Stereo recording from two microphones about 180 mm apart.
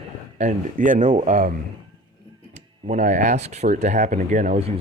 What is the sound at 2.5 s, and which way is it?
Speech, 40° right (ahead or behind).